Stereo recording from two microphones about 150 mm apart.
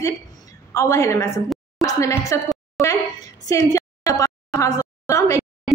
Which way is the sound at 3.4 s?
20° left (ahead or behind).